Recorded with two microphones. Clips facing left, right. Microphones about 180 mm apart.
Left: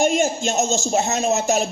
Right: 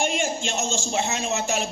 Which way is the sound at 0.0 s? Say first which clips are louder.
Left 7 dB; 45° left (ahead or behind).